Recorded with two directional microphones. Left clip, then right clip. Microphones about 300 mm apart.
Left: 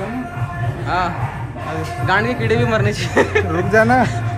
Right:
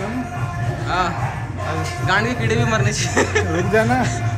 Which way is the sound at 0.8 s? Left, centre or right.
Centre.